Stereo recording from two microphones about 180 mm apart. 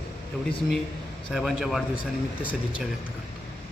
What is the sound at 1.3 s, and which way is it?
Speech, 5° right (ahead or behind).